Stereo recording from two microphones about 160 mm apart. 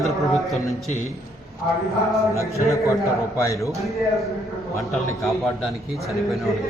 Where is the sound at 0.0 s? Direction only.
Centre (ahead or behind).